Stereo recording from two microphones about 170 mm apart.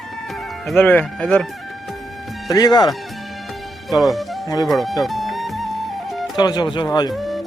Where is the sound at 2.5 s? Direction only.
25° left (ahead or behind).